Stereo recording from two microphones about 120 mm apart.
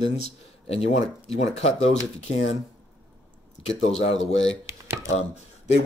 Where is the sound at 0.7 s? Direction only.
65° left (ahead or behind).